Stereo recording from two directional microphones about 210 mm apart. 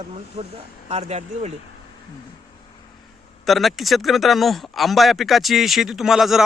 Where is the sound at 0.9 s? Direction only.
30° right (ahead or behind).